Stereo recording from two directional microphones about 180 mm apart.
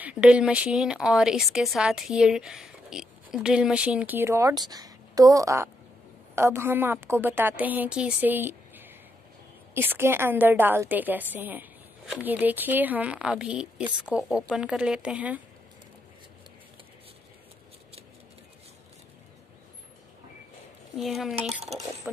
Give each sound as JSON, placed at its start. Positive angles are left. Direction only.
{"t": 0.0, "sound": "a woman's voice", "side_deg": -5}
{"t": 20.9, "sound": "a woman's voice", "side_deg": 0}
{"t": 21.7, "sound": "speech", "side_deg": -35}